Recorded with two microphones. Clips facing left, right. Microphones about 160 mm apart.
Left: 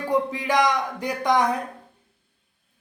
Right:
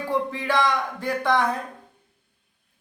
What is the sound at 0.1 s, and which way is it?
A man's voice, 15° left (ahead or behind).